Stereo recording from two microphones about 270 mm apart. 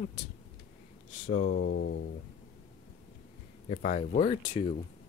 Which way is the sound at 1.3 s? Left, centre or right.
Left.